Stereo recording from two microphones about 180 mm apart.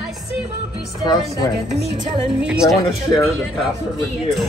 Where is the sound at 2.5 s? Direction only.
5° right (ahead or behind).